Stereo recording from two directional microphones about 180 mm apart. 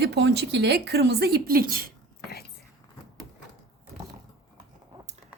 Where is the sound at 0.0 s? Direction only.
70° right (ahead or behind); by 1.9 s 55° right (ahead or behind).